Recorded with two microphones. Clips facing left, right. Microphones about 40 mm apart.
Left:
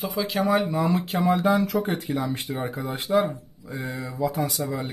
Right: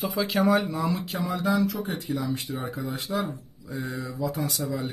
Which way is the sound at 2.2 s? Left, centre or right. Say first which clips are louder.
Left 2 dB; left.